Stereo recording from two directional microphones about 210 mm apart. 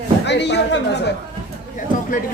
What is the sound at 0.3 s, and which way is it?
Speech, 55° left (ahead or behind).